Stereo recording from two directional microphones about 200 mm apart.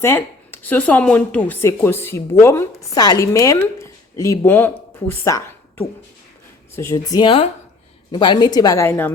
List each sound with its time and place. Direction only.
0.0 s a woman's voice: 10° left (ahead or behind)